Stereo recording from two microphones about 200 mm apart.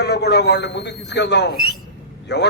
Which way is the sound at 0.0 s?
55° left (ahead or behind).